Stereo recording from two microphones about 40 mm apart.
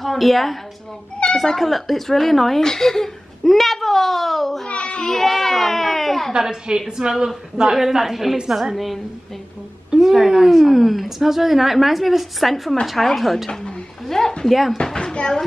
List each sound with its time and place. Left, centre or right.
0.0 s a child's voice: centre
4.6 s a sound: left
5.0 s speech: centre
6.3 s a woman's voice: centre
9.9 s a woman's voice: centre
14.0 s speech: centre
14.4 s speech: centre
14.8 s speech: centre